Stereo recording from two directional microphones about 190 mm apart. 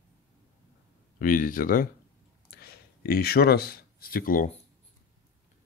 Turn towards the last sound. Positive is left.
turn(degrees=45)  # may be behind; listen again after turning